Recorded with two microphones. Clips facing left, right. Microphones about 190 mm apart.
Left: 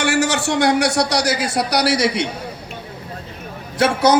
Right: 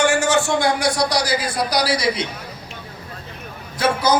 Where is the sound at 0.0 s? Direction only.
65° left (ahead or behind).